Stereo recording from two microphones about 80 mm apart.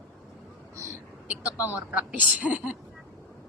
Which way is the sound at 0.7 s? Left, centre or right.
Right.